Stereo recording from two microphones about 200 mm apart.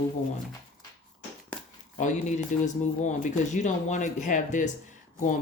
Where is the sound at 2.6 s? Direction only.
35° left (ahead or behind).